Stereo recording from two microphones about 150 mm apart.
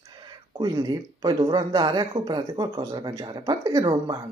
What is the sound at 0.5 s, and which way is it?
Speech, 25° right (ahead or behind).